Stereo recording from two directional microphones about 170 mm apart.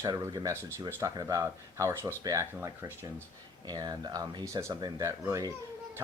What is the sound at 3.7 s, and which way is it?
Speech, 25° right (ahead or behind).